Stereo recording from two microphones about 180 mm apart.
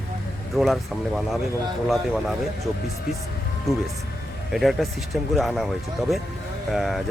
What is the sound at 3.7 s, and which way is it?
Speech, centre (ahead or behind).